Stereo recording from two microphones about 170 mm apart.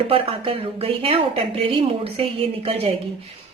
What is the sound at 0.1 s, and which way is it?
A woman's voice, 35° right (ahead or behind).